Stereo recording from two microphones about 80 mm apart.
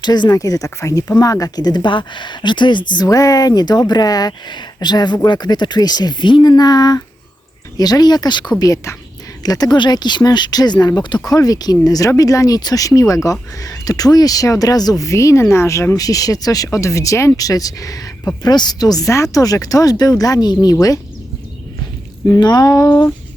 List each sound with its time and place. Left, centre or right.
0.0 s speech: left
0.3 s speech: left
3.1 s speech: left
9.4 s speech: left
22.4 s speech: left
22.8 s a sound: centre